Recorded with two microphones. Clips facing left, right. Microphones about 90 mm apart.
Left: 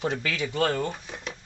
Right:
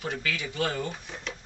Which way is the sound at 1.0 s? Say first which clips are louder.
Left 1 dB; 5° left (ahead or behind).